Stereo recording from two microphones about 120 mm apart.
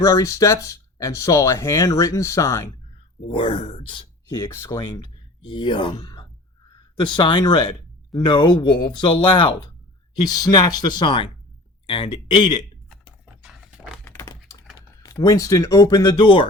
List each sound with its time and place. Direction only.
0.0 s speech: 25° left (ahead or behind)
3.2 s speech: 45° left (ahead or behind)
4.3 s speech: 30° left (ahead or behind)
13.4 s a sound: 5° right (ahead or behind)
14.0 s a sound: 25° left (ahead or behind)
15.0 s speech: 25° left (ahead or behind)
16.2 s speech: 45° left (ahead or behind)